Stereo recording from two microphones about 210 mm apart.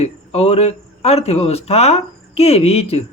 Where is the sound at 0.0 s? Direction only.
30° left (ahead or behind).